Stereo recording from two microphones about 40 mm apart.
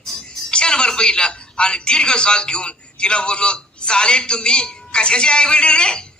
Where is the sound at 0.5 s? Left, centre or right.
Left.